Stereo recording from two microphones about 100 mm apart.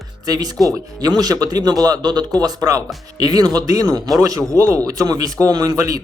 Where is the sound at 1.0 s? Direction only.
40° right (ahead or behind).